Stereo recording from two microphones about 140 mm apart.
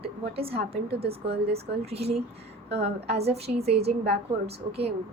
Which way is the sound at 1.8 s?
45° right (ahead or behind).